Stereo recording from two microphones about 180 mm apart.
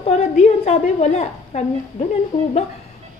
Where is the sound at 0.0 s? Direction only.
35° left (ahead or behind).